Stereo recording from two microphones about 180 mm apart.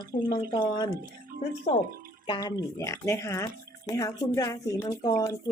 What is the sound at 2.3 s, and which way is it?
Speech, 25° left (ahead or behind).